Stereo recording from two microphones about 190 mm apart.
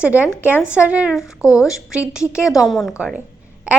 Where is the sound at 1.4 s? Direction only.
15° left (ahead or behind).